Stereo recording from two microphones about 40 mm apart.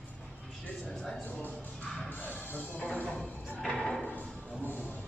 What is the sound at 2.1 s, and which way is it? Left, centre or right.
Music, left.